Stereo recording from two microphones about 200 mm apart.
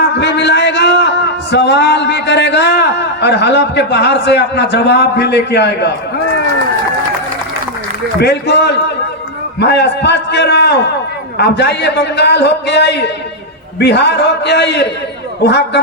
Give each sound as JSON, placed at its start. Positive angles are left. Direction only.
{"t": 0.2, "sound": "a man's voice", "side_deg": 60}
{"t": 8.2, "sound": "a man's voice", "side_deg": 55}